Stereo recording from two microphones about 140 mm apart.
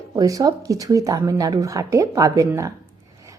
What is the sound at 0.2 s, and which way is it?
Speech, 25° right (ahead or behind).